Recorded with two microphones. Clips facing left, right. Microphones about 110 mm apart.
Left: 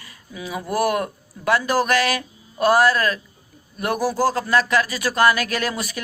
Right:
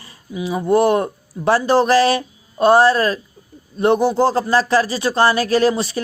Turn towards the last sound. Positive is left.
turn(degrees=-30)  # may be behind; listen again after turning